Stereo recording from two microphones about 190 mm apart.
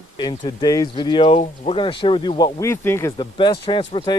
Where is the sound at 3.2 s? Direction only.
25° left (ahead or behind).